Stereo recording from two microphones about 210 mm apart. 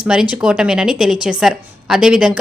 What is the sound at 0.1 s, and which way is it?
Speech, 5° right (ahead or behind).